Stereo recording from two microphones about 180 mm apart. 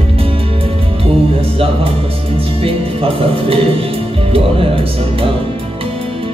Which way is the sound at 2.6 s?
30° right (ahead or behind).